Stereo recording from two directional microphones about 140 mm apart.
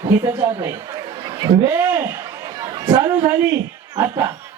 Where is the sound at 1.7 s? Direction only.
20° right (ahead or behind).